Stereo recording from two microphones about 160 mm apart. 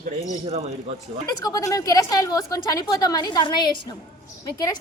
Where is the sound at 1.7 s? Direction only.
20° left (ahead or behind).